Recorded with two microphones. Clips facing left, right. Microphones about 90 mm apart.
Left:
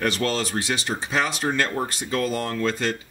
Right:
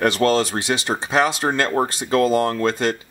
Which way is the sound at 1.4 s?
35° right (ahead or behind).